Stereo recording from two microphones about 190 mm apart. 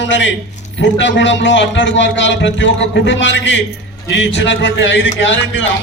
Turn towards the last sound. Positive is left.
turn(degrees=75)  # may be behind; listen again after turning